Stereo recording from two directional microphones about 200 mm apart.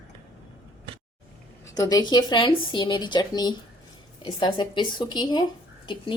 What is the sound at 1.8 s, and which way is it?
A woman's voice, 20° left (ahead or behind).